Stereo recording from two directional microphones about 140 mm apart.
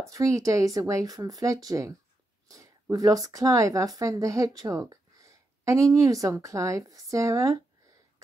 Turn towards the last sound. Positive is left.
turn(degrees=-20)  # may be behind; listen again after turning